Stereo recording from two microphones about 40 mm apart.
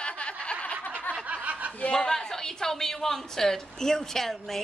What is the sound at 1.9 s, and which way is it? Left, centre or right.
A woman's voice, centre.